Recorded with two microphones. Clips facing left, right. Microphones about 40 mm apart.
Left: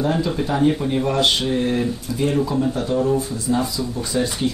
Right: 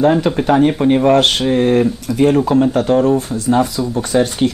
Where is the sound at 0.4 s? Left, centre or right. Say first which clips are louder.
Right 6 dB; right.